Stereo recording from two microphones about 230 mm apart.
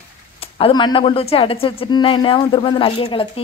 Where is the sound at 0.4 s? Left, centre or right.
Left.